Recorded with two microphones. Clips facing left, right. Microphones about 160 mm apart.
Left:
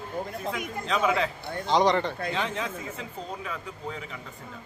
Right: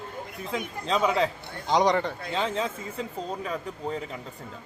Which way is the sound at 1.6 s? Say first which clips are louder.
Even; 15° right (ahead or behind).